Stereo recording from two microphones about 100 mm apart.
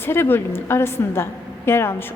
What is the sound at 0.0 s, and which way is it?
A woman's voice, 25° left (ahead or behind).